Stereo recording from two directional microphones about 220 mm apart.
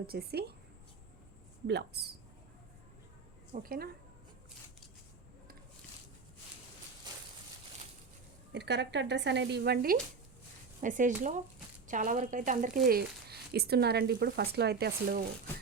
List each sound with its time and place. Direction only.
0.1 s speech: 45° right (ahead or behind)
1.6 s speech: 50° right (ahead or behind)
3.5 s speech: 40° right (ahead or behind)
8.5 s speech: 50° right (ahead or behind)